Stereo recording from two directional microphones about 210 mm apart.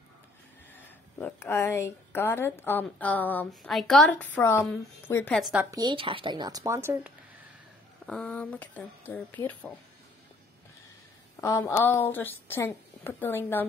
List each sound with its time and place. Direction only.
0.7 s a woman's voice: 10° left (ahead or behind)
5.8 s speech: 25° right (ahead or behind)
8.1 s a woman's voice: 5° left (ahead or behind)
11.4 s a woman's voice: 15° left (ahead or behind)